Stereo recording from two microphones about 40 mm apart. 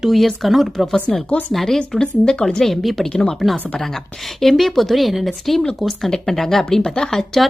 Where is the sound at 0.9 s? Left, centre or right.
Left.